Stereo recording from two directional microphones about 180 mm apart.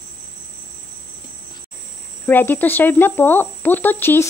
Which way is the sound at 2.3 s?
10° left (ahead or behind).